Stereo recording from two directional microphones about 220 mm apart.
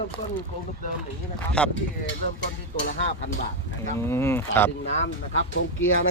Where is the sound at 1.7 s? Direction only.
55° left (ahead or behind).